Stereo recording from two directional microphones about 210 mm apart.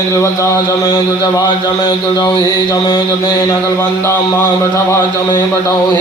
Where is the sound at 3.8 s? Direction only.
10° left (ahead or behind).